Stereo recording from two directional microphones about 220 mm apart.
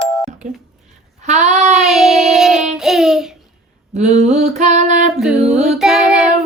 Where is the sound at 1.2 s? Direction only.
30° right (ahead or behind).